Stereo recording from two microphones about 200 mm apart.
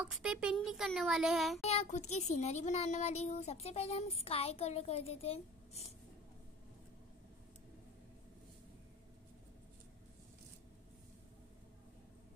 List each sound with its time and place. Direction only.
0.0 s speech: 5° right (ahead or behind)
1.6 s speech: 30° left (ahead or behind)